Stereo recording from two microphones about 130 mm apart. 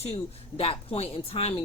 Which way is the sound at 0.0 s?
50° left (ahead or behind).